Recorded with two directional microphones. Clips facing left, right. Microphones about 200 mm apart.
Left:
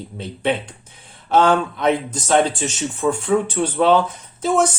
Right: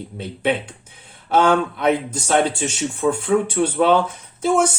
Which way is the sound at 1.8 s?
10° right (ahead or behind).